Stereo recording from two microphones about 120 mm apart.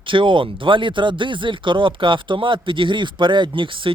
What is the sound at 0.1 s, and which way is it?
Speech, 45° right (ahead or behind).